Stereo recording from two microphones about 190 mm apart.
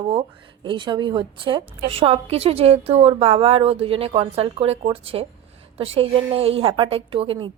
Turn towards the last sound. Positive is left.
turn(degrees=-30)  # may be behind; listen again after turning